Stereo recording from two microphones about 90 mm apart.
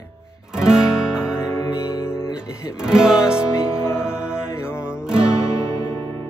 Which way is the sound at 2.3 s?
10° right (ahead or behind).